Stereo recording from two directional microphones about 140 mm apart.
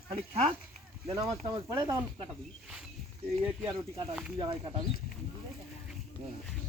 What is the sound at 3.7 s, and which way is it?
Speech, 30° right (ahead or behind).